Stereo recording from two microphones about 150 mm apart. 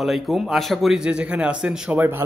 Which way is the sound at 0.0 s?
Centre (ahead or behind).